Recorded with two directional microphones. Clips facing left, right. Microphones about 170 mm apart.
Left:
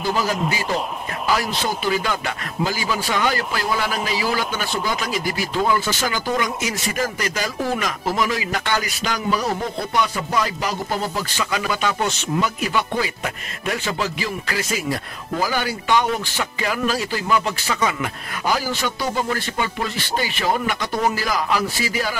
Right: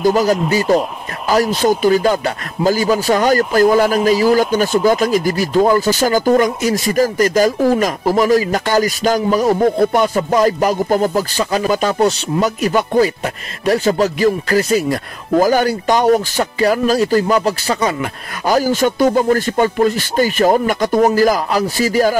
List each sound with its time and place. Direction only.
0.0 s speech: 45° right (ahead or behind)